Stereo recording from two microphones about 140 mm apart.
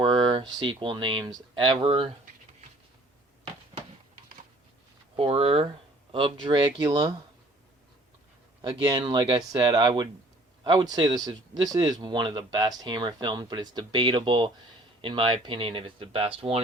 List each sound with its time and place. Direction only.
0.0 s speech: 35° right (ahead or behind)
5.1 s speech: 45° right (ahead or behind)
8.6 s speech: 30° right (ahead or behind)